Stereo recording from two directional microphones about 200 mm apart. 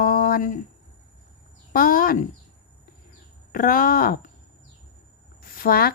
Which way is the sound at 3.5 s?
45° left (ahead or behind).